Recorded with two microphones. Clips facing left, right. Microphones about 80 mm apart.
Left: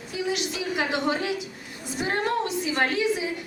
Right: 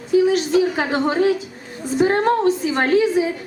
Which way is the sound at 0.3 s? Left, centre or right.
Right.